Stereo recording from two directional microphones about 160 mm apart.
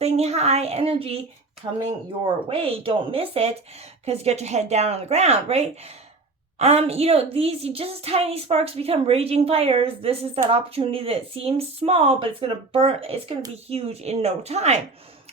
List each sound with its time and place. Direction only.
0.0 s a woman's voice: 40° right (ahead or behind)